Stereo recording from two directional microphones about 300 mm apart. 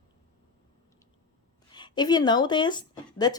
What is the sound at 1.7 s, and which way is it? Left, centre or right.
Speech, centre.